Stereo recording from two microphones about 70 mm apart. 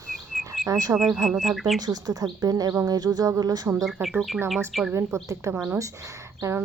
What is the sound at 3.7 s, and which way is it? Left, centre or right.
Speech, centre.